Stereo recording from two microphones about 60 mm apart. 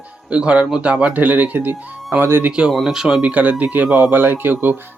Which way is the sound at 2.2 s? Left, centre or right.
Right.